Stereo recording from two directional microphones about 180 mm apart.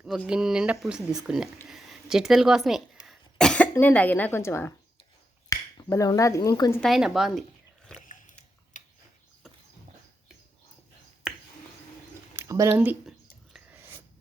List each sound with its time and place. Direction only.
0.3 s speech: 5° right (ahead or behind); by 6.8 s 15° left (ahead or behind)
6.8 s speech: centre (ahead or behind)
7.9 s biting: 45° left (ahead or behind)
8.7 s a sound: 45° left (ahead or behind)
12.4 s speech: 15° right (ahead or behind)